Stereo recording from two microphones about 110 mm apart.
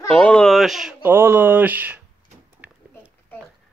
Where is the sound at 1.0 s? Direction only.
20° right (ahead or behind).